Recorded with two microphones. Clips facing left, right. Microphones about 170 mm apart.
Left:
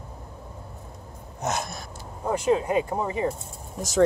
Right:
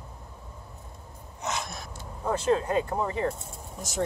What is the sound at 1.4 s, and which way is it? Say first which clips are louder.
Gasp: left 4 dB; 50° left (ahead or behind).